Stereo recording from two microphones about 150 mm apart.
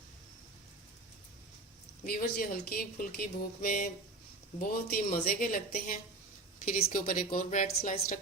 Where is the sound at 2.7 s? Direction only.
75° left (ahead or behind).